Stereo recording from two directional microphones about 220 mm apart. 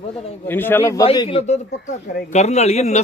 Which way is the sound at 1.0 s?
25° left (ahead or behind).